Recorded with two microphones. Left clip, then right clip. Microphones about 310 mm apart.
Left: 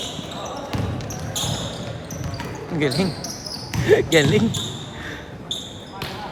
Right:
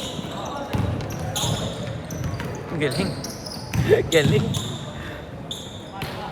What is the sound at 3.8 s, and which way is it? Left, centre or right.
Speech, left.